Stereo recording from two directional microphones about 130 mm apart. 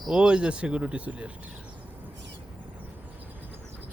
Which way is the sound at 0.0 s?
5° right (ahead or behind).